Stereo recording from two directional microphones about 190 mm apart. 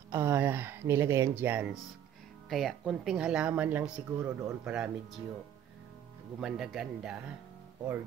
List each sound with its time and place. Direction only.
0.1 s speech: 10° right (ahead or behind)
6.4 s speech: centre (ahead or behind)